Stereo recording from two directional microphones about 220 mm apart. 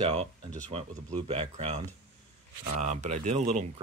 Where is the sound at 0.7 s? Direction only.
25° right (ahead or behind).